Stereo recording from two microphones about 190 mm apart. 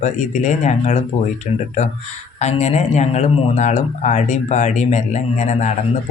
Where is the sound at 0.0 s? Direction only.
40° left (ahead or behind).